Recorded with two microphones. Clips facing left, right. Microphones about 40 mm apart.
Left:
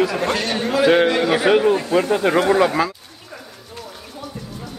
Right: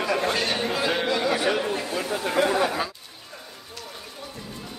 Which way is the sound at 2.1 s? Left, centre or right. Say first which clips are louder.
Left 10 dB; left.